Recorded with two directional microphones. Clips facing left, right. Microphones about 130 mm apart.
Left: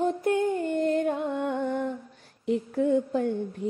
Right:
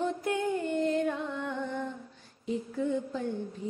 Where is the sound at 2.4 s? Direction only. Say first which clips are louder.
Left 6 dB; 60° left (ahead or behind).